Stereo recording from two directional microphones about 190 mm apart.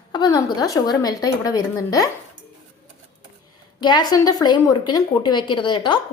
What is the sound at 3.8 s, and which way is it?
A woman's voice, 20° left (ahead or behind).